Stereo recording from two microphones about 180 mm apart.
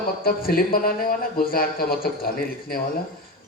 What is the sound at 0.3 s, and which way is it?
Speech, 55° left (ahead or behind).